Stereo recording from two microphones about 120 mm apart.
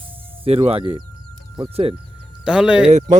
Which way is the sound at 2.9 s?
90° right.